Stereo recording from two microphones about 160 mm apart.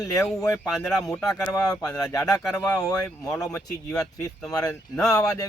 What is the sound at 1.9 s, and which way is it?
Speech, 20° left (ahead or behind).